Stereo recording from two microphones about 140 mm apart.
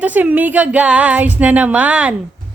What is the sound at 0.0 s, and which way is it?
Speech, 10° right (ahead or behind).